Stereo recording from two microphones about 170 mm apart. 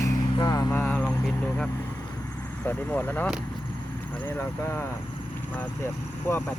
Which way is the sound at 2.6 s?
10° left (ahead or behind).